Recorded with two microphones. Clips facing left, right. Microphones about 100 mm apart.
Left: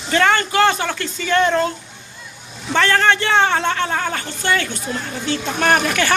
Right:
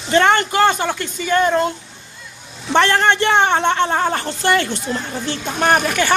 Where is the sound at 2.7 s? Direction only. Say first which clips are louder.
Right 1 dB; 25° right (ahead or behind).